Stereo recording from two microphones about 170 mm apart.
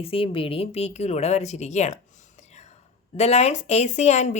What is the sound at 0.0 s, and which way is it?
Speech, 35° left (ahead or behind).